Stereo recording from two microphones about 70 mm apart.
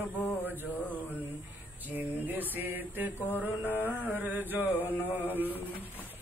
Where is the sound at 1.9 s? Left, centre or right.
Right.